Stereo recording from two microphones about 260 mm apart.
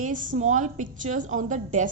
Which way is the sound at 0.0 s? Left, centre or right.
Right.